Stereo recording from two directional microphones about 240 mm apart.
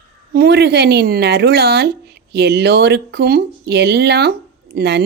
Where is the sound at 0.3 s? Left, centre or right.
Right.